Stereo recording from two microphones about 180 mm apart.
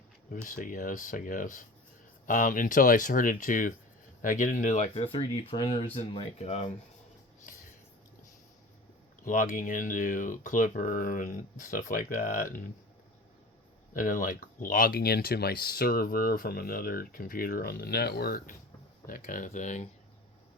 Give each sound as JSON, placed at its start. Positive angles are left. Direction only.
{"t": 0.4, "sound": "speech", "side_deg": 50}
{"t": 9.2, "sound": "speech", "side_deg": 45}
{"t": 13.9, "sound": "speech", "side_deg": 50}